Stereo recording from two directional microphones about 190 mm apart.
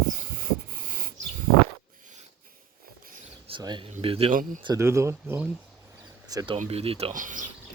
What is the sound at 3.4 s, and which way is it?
Speech, 25° right (ahead or behind).